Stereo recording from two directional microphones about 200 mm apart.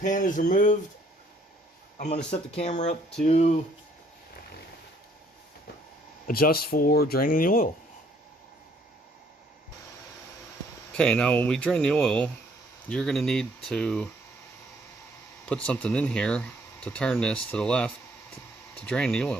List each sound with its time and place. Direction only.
0.0 s speech: 40° left (ahead or behind)
2.0 s speech: 35° left (ahead or behind)
6.2 s speech: 50° left (ahead or behind)
10.9 s speech: 5° left (ahead or behind)
15.4 s speech: 5° left (ahead or behind)